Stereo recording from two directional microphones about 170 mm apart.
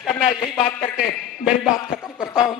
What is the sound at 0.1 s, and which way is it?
Speech, 25° left (ahead or behind).